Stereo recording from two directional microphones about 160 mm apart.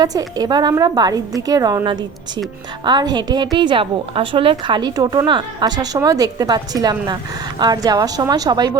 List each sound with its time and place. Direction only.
0.0 s a woman's voice: 25° right (ahead or behind)